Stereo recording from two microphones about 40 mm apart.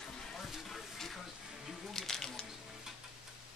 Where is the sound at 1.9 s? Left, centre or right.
Centre.